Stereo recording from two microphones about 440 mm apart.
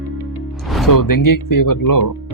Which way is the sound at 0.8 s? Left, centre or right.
Left.